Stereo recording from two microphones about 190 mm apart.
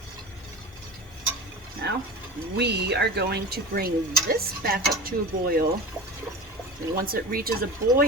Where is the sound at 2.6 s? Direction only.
60° right (ahead or behind).